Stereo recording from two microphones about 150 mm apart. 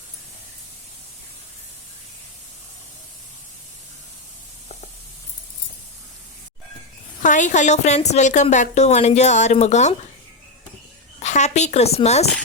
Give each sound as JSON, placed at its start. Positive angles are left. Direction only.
{"t": 7.2, "sound": "a woman's voice", "side_deg": 55}
{"t": 11.2, "sound": "a woman's voice", "side_deg": 50}